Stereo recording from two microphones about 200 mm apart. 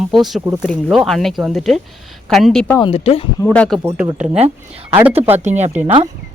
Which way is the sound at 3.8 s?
10° right (ahead or behind).